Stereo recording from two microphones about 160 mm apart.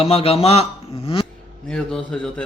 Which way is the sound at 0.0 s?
35° left (ahead or behind).